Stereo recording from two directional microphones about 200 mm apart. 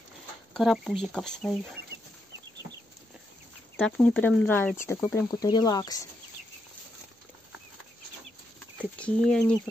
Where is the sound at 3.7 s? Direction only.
5° left (ahead or behind).